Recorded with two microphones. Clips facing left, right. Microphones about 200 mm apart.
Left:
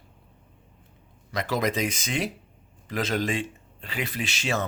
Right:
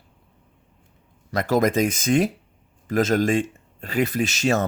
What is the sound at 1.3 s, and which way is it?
Speech, 45° right (ahead or behind).